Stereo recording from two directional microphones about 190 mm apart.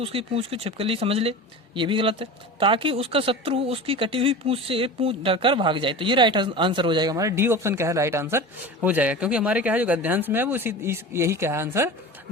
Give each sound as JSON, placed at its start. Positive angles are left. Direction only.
{"t": 0.0, "sound": "speech", "side_deg": -30}